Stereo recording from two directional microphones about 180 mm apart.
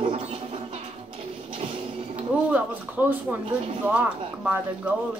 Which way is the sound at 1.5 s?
30° right (ahead or behind).